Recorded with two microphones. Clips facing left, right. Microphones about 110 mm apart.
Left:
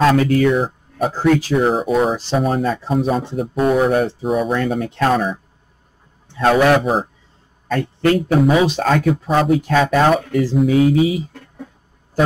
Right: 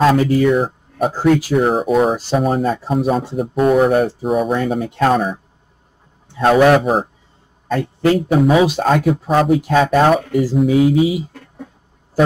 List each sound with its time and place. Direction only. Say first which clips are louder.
0.0 s speech: right 1 dB; 5° right (ahead or behind)